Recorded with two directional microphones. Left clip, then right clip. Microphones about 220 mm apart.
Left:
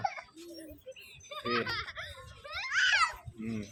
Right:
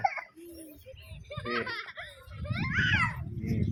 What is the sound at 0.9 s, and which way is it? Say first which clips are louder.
Baby laughter: right 1 dB; 45° left (ahead or behind).